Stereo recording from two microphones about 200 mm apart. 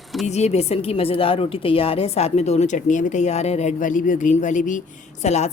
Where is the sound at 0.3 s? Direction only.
35° left (ahead or behind).